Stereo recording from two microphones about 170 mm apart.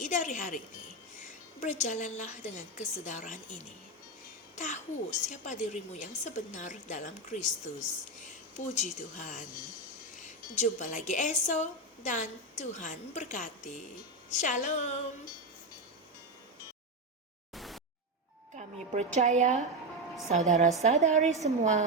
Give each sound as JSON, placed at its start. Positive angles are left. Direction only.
{"t": 0.0, "sound": "a woman's voice", "side_deg": 45}
{"t": 4.5, "sound": "a child's voice", "side_deg": 45}
{"t": 17.5, "sound": "a sound", "side_deg": 0}
{"t": 18.5, "sound": "a woman's voice", "side_deg": -45}